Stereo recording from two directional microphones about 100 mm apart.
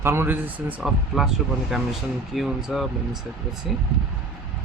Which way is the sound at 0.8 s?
5° right (ahead or behind).